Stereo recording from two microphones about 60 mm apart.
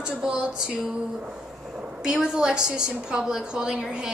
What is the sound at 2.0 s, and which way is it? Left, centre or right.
A woman's voice, centre.